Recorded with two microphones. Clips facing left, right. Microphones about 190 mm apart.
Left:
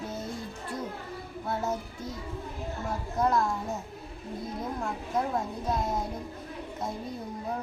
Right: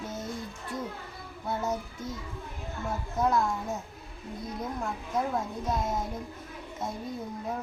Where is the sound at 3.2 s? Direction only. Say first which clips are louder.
Even; centre (ahead or behind).